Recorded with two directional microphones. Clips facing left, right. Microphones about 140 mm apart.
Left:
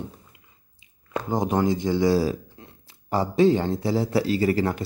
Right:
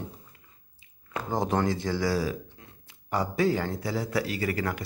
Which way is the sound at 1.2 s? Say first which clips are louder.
Left 4 dB; 15° left (ahead or behind).